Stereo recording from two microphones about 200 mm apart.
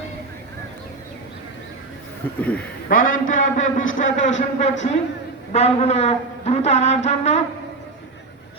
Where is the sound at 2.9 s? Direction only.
45° left (ahead or behind).